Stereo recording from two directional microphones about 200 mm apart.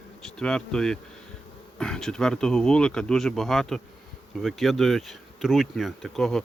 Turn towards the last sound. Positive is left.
turn(degrees=0)  # may be behind; listen again after turning